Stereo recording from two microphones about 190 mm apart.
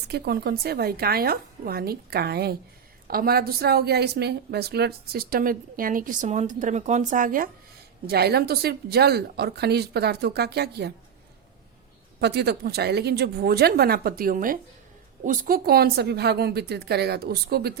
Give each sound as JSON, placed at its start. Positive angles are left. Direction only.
{"t": 0.1, "sound": "a woman's voice", "side_deg": -55}
{"t": 12.2, "sound": "speech", "side_deg": -60}